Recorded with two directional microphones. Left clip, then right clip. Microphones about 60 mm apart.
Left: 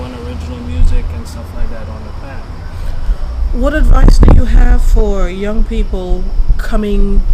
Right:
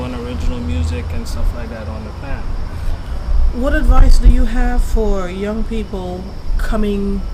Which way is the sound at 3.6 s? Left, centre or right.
Left.